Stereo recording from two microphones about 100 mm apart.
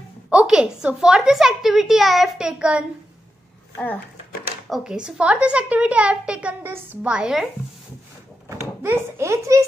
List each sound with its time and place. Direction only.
0.3 s a woman's voice: 10° right (ahead or behind)
3.7 s speech: 15° left (ahead or behind)
4.6 s a woman's voice: 5° right (ahead or behind)
8.8 s a child's voice: 25° right (ahead or behind)